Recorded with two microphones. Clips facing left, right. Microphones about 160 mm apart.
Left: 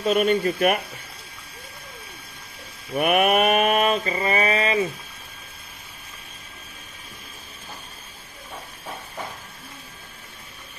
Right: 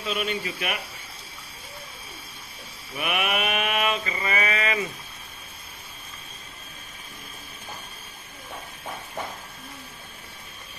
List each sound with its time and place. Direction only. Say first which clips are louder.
0.0 s speech: left 9 dB; 45° left (ahead or behind)
3.0 s mantra: left 8 dB; 45° left (ahead or behind)